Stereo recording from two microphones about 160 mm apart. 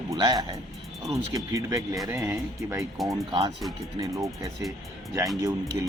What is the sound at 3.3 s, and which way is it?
Speech, 30° right (ahead or behind).